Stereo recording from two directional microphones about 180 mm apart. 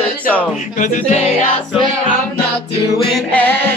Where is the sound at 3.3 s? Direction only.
10° left (ahead or behind).